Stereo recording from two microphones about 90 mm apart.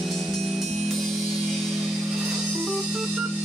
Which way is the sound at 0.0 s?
Centre (ahead or behind).